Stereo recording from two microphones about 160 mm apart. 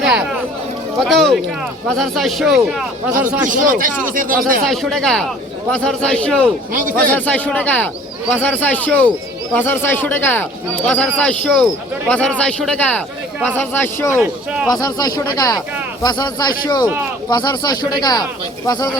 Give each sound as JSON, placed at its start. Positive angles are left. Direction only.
{"t": 0.0, "sound": "a sound", "side_deg": -5}
{"t": 1.0, "sound": "a man's voice", "side_deg": 0}
{"t": 3.5, "sound": "speech", "side_deg": -55}
{"t": 4.6, "sound": "a man's voice", "side_deg": 0}
{"t": 14.2, "sound": "speech", "side_deg": -5}
{"t": 14.7, "sound": "speech", "side_deg": 25}